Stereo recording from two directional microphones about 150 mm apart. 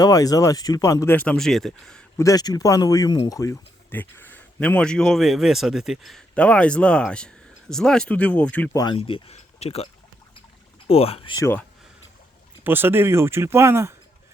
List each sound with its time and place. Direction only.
0.0 s speech: 25° left (ahead or behind); by 2.0 s 5° left (ahead or behind)
2.1 s speech: 25° left (ahead or behind)
8.7 s speech: 25° left (ahead or behind)
9.0 s speech: 40° left (ahead or behind)
12.6 s speech: 15° right (ahead or behind)